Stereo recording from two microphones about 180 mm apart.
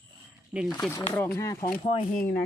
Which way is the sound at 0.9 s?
15° left (ahead or behind).